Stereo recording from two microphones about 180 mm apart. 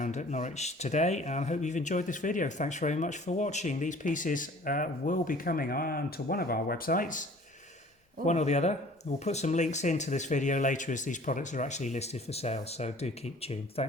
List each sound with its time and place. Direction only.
0.0 s speech: 40° left (ahead or behind)
8.3 s speech: 40° left (ahead or behind)